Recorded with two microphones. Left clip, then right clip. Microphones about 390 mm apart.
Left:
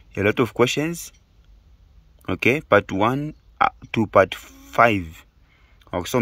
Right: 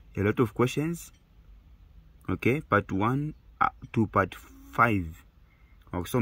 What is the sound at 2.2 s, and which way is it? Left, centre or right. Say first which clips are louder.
Speech: left 8 dB; left.